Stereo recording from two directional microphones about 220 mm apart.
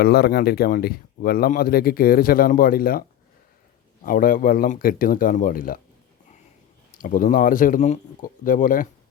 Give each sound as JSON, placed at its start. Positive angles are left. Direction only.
{"t": 0.0, "sound": "speech", "side_deg": 45}
{"t": 4.0, "sound": "speech", "side_deg": 40}
{"t": 7.0, "sound": "speech", "side_deg": 40}